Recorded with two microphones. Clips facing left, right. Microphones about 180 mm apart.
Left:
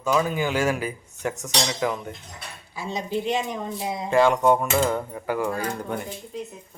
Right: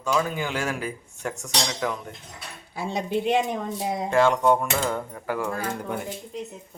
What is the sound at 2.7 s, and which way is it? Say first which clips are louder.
Speech: right 1 dB; 55° right (ahead or behind).